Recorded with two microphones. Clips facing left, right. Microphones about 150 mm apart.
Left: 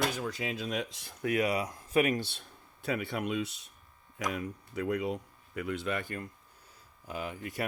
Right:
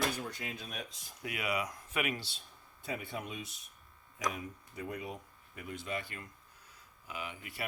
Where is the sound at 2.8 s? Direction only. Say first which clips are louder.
Left 7 dB; 75° left (ahead or behind).